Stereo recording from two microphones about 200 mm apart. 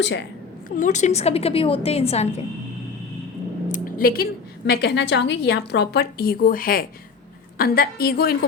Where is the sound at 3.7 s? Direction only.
45° left (ahead or behind).